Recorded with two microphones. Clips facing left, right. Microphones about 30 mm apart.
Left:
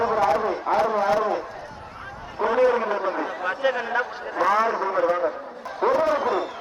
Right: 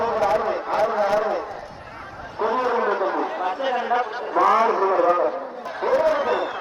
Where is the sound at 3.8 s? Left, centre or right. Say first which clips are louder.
Right 3 dB; right.